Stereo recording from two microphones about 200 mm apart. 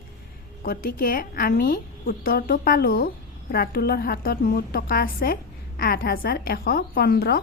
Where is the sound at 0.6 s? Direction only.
45° left (ahead or behind).